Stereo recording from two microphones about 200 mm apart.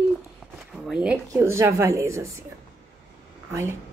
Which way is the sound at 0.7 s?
5° right (ahead or behind).